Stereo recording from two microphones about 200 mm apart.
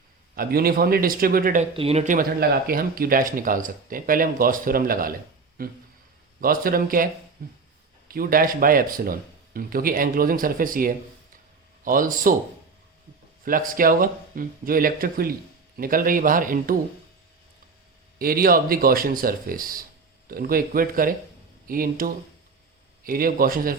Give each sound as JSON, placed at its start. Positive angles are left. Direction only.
{"t": 0.3, "sound": "speech", "side_deg": -50}
{"t": 1.7, "sound": "speech", "side_deg": -30}
{"t": 13.4, "sound": "speech", "side_deg": -45}
{"t": 18.2, "sound": "speech", "side_deg": -45}